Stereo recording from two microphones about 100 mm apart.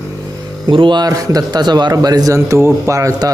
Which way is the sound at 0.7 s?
55° right (ahead or behind).